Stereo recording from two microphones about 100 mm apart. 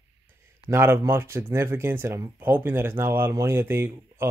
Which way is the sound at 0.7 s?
25° right (ahead or behind).